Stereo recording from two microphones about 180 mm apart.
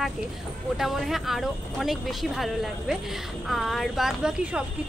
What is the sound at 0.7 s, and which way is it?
Speech, centre (ahead or behind).